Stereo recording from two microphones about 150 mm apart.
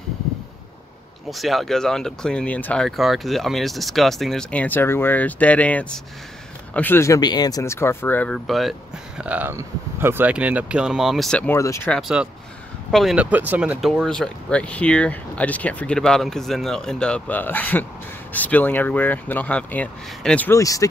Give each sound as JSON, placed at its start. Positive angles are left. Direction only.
{"t": 1.3, "sound": "speech", "side_deg": 0}
{"t": 8.5, "sound": "speech", "side_deg": 0}
{"t": 9.2, "sound": "speech", "side_deg": -10}
{"t": 11.5, "sound": "speech", "side_deg": 20}
{"t": 11.9, "sound": "speech", "side_deg": -5}
{"t": 14.0, "sound": "speech", "side_deg": 5}
{"t": 20.5, "sound": "speech", "side_deg": 20}